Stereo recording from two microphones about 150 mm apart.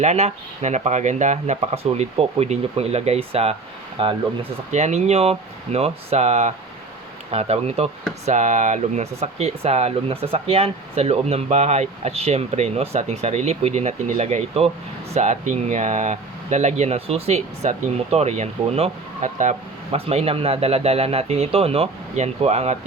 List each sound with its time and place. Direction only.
0.0 s speech: 50° right (ahead or behind)
4.7 s speech: 50° right (ahead or behind)